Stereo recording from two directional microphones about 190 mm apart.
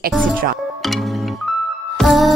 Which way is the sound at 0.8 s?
Centre (ahead or behind).